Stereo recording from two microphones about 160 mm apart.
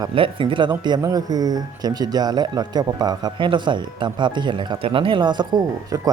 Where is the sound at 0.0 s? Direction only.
35° right (ahead or behind).